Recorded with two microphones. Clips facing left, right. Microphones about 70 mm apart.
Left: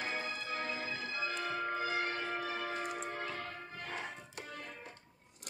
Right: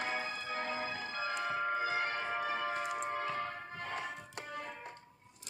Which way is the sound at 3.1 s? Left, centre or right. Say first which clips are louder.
Right 4 dB; right.